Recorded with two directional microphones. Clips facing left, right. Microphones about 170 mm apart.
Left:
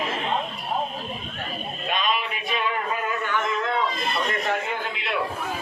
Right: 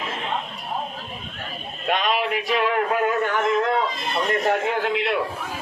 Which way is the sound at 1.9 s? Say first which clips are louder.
Right 5 dB; 80° right.